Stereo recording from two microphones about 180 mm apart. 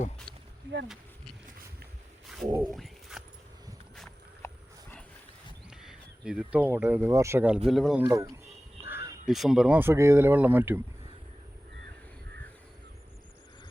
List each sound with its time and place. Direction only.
2.2 s a sound: centre (ahead or behind)
2.7 s dog: centre (ahead or behind)
4.4 s dog: 10° left (ahead or behind)
5.7 s speech: 5° right (ahead or behind)
8.0 s speech: 20° right (ahead or behind)
8.8 s crow: 15° right (ahead or behind)
9.2 s speech: centre (ahead or behind)